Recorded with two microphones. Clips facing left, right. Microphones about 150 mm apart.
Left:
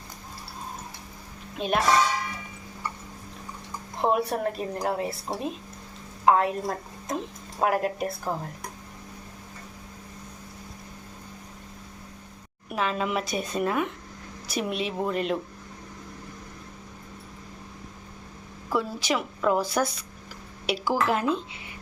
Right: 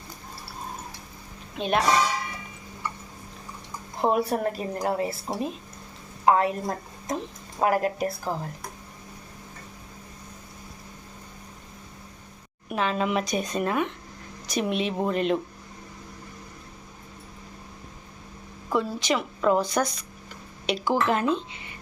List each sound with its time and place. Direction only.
1.5 s a woman's voice: centre (ahead or behind)
4.0 s a woman's voice: centre (ahead or behind)
12.6 s a woman's voice: centre (ahead or behind)
18.7 s a woman's voice: 5° left (ahead or behind)